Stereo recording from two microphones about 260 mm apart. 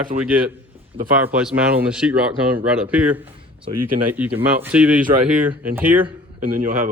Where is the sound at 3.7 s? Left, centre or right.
Right.